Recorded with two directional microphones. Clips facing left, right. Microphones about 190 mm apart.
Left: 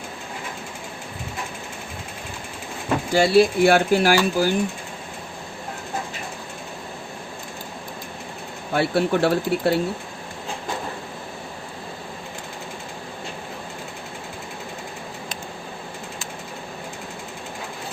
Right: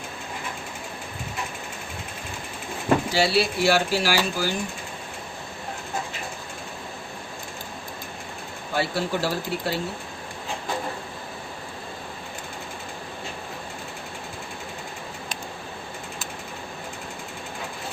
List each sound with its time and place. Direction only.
3.1 s speech: 50° left (ahead or behind)
8.7 s speech: 60° left (ahead or behind)